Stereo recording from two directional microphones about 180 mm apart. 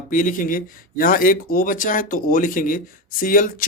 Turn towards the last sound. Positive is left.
turn(degrees=50)  # may be behind; listen again after turning